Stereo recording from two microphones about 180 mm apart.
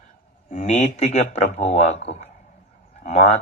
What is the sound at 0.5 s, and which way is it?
Speech, 40° left (ahead or behind).